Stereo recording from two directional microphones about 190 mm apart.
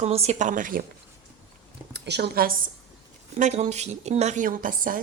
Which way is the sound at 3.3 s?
35° right (ahead or behind).